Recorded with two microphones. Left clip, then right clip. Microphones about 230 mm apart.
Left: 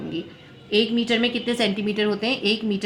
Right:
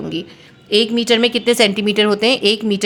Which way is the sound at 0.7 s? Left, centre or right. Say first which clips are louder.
Right 7 dB; right.